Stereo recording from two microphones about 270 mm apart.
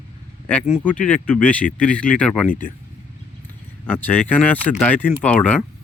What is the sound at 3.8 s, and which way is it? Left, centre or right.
Speech, centre.